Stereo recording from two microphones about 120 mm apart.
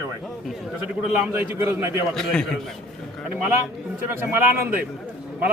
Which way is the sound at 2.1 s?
5° left (ahead or behind).